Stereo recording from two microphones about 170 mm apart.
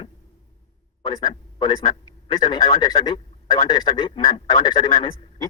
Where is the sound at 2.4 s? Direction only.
25° left (ahead or behind).